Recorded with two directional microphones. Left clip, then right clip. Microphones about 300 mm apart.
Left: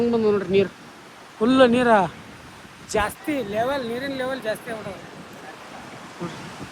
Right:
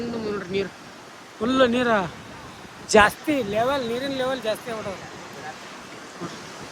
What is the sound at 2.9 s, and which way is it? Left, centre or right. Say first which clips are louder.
Speech: right 8 dB; right.